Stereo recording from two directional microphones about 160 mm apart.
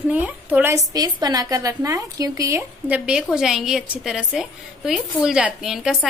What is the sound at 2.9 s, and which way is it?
A woman's voice, 5° right (ahead or behind).